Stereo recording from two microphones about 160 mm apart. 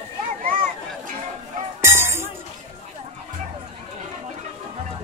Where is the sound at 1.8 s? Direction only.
15° right (ahead or behind).